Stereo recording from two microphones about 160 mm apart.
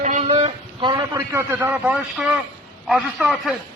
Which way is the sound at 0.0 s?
45° right (ahead or behind).